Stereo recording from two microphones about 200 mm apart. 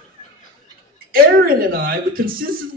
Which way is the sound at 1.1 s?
50° right (ahead or behind).